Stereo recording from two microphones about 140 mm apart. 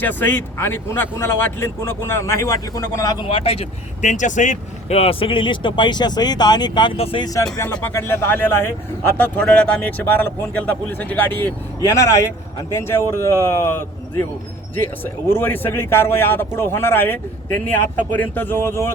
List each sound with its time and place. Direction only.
0.0 s speech: 15° left (ahead or behind)
3.2 s speech: 45° left (ahead or behind)
4.1 s speech: 60° left (ahead or behind); by 6.9 s 30° left (ahead or behind)
6.9 s speech: 45° left (ahead or behind)
7.5 s speech: 20° left (ahead or behind)